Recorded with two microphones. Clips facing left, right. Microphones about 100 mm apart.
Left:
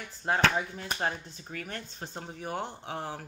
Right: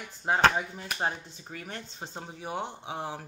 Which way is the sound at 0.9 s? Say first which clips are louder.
Right 1 dB; 20° right (ahead or behind).